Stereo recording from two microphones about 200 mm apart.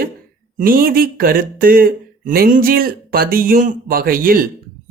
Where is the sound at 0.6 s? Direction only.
45° right (ahead or behind).